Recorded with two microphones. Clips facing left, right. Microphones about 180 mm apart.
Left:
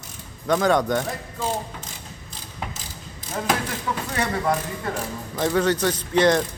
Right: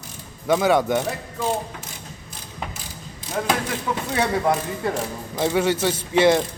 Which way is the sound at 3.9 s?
10° right (ahead or behind).